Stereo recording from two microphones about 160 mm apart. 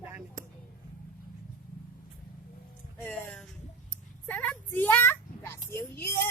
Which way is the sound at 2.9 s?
10° left (ahead or behind).